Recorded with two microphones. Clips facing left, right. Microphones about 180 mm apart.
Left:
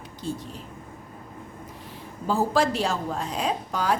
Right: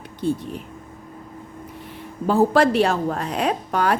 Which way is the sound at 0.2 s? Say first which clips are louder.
Right 9 dB; 60° right (ahead or behind).